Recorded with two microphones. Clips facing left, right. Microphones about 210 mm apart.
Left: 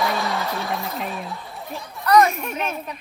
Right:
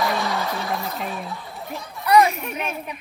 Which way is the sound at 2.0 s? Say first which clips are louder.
Even; 10° right (ahead or behind).